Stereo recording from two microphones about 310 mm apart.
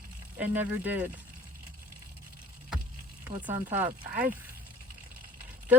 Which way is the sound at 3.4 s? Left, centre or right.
Centre.